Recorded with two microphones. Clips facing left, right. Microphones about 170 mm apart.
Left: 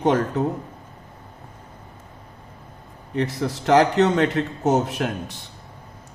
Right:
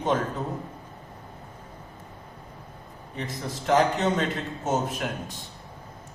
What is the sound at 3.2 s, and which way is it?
A man's voice, 70° left (ahead or behind).